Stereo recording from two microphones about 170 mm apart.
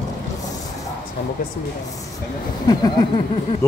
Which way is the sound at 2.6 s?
25° left (ahead or behind).